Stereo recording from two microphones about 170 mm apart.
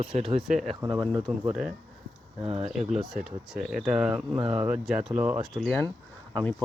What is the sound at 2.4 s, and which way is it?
Speech, 35° right (ahead or behind).